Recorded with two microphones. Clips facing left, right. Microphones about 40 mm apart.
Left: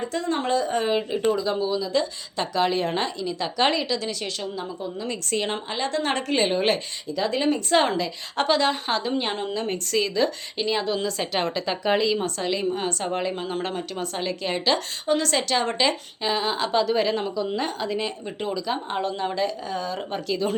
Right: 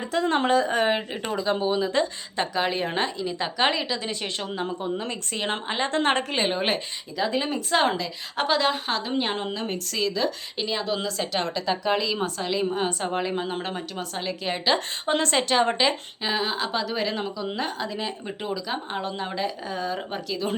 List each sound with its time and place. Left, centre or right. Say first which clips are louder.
0.3 s speech: right 2 dB; right
2.3 s a woman's voice: left 4 dB; right
4.4 s speech: right 2 dB; right
5.0 s a woman's voice: left 3 dB; centre
5.5 s a woman's voice: right 1 dB; right
6.2 s a woman's voice: left 3 dB; centre
9.6 s a woman's voice: left 3 dB; centre
12.1 s a woman's voice: left 1 dB; centre
15.0 s speech: left 2 dB; right
15.4 s a woman's voice: right 2 dB; right
15.8 s speech: left 1 dB; centre